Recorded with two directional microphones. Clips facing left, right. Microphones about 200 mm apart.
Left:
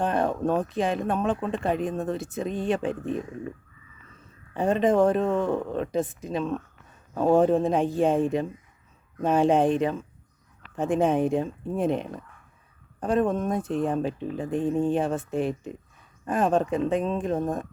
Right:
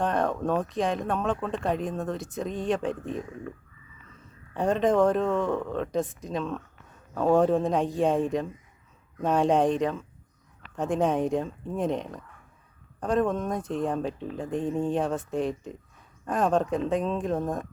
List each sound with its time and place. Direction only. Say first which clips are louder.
0.0 s a sound: left 1 dB; 5° left (ahead or behind)
0.4 s speech: left 2 dB; 5° left (ahead or behind)
4.5 s speech: left 1 dB; 5° left (ahead or behind)
7.1 s a man's voice: left 2 dB; 15° left (ahead or behind)
7.3 s speech: left 2 dB; 5° left (ahead or behind)